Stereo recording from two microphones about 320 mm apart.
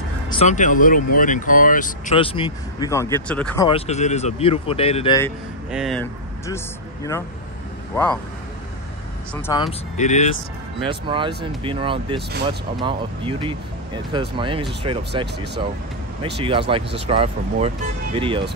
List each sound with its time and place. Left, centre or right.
0.3 s speech: left; by 3.6 s centre
3.6 s speech: centre
5.7 s speech: centre
7.9 s speech: centre
9.3 s speech: centre
10.9 s speech: centre
16.7 s speech: centre